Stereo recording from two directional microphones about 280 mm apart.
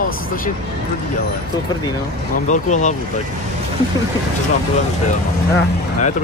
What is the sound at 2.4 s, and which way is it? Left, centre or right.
Speech, left.